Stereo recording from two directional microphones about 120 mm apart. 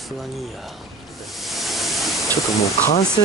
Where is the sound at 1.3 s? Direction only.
Centre (ahead or behind).